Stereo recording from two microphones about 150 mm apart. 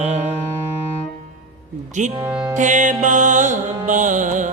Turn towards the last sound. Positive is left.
turn(degrees=-60)  # may be behind; listen again after turning